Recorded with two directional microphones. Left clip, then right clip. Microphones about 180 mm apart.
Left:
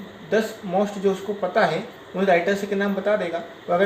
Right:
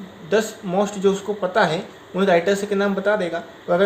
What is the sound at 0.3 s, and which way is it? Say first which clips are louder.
Speech: right 2 dB; 60° right (ahead or behind).